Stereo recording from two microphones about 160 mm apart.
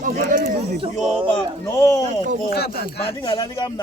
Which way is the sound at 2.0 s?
50° right (ahead or behind).